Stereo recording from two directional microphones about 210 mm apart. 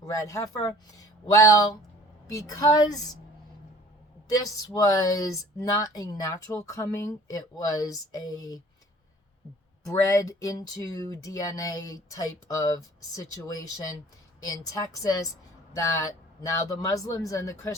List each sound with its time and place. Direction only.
0.1 s speech: 15° left (ahead or behind)
4.4 s speech: 15° left (ahead or behind)
9.9 s speech: 15° left (ahead or behind)